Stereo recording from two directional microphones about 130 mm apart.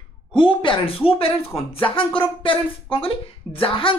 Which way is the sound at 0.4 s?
40° left (ahead or behind).